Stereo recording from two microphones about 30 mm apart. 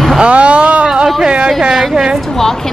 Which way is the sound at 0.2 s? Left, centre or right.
Right.